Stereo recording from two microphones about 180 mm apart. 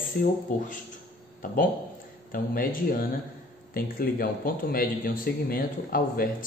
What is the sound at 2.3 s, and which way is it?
A man's voice, 55° left (ahead or behind).